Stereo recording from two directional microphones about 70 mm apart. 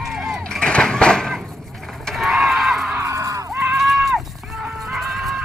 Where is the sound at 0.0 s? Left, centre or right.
Centre.